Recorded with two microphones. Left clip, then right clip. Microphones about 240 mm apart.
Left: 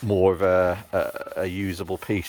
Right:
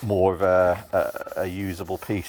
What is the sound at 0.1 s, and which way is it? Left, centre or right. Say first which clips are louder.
Speech: even; centre.